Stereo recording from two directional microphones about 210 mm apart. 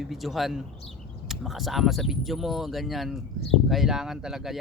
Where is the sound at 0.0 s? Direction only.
Centre (ahead or behind).